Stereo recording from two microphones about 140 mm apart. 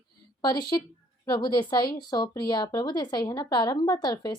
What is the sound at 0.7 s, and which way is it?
A woman's voice, 30° left (ahead or behind).